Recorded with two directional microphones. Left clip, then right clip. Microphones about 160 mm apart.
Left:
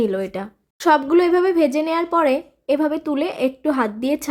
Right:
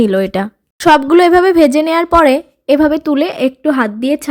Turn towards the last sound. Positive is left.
turn(degrees=-20)  # may be behind; listen again after turning